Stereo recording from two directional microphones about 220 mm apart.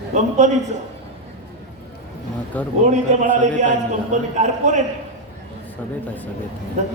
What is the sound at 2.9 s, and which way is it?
A man's voice, 35° right (ahead or behind).